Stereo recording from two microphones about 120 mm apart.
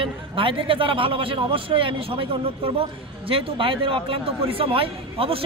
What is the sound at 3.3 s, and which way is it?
Speech, 50° right (ahead or behind).